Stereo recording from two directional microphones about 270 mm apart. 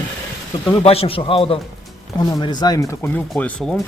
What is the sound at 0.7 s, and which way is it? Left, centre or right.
A man's voice, left.